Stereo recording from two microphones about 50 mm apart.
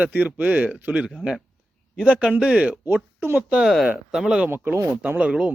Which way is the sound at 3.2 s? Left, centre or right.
Right.